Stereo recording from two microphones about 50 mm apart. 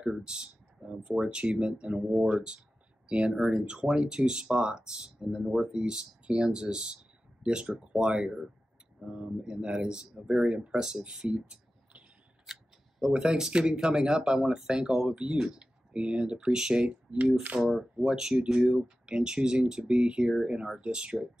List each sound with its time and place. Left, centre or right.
0.0 s a sound: centre
1.2 s speech: centre
12.5 s camera: centre
13.0 s speech: centre
16.9 s speech: right
17.5 s speech: centre